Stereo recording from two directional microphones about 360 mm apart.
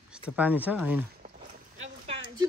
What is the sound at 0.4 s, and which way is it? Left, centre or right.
Speech, centre.